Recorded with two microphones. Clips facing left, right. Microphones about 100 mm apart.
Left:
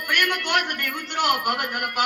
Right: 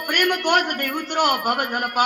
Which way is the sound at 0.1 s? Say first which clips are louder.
Right 4 dB; 40° right (ahead or behind).